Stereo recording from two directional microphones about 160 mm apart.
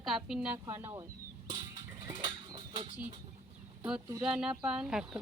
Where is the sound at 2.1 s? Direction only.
30° right (ahead or behind).